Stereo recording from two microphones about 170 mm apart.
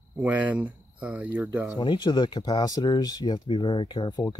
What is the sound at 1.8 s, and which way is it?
Speech, 25° left (ahead or behind).